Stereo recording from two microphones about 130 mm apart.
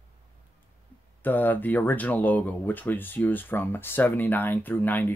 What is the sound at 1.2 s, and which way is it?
Speech, 15° left (ahead or behind).